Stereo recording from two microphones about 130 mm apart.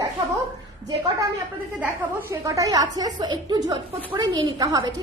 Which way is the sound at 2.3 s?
25° right (ahead or behind).